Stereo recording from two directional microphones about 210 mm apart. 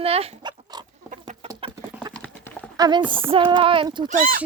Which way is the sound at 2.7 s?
20° right (ahead or behind).